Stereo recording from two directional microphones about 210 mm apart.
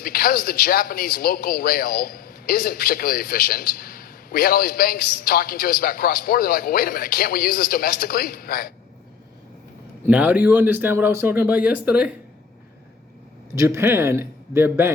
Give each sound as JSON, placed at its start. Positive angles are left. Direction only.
{"t": 0.0, "sound": "a man's voice", "side_deg": 45}
{"t": 10.1, "sound": "speech", "side_deg": -5}
{"t": 13.6, "sound": "speech", "side_deg": -15}